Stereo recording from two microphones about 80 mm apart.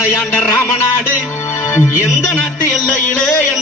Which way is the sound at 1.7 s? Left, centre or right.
Left.